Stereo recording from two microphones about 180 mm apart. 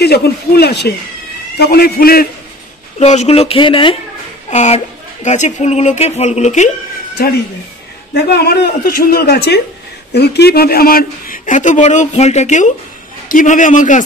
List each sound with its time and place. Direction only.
0.0 s a woman's voice: 60° left (ahead or behind)
3.0 s speech: 35° left (ahead or behind)
8.1 s a woman's voice: 65° left (ahead or behind); by 14.0 s 45° left (ahead or behind)